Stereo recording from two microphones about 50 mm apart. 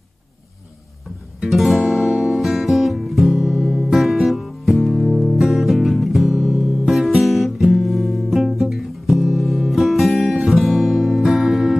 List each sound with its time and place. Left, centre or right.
1.5 s music: centre
7.2 s guitar: centre
10.3 s music: centre
10.6 s music: centre